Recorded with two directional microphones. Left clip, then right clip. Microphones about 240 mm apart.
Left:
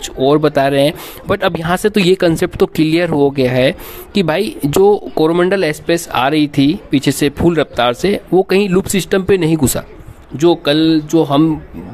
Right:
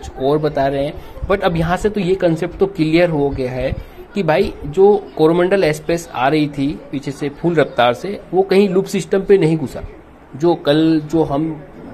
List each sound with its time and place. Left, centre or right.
0.2 s speech: left
3.4 s speech: left
4.3 s speech: left
10.3 s a man's voice: left